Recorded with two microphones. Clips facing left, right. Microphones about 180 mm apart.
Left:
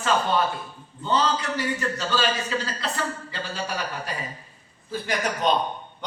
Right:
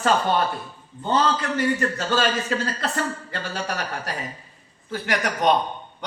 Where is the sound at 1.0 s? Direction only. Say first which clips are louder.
Right 2 dB; 50° right (ahead or behind).